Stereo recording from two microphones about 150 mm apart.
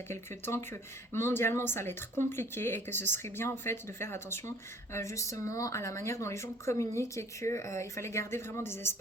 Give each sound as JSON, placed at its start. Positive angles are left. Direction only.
{"t": 0.1, "sound": "speech", "side_deg": 15}